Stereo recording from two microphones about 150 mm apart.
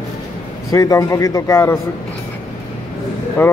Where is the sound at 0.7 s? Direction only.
25° left (ahead or behind).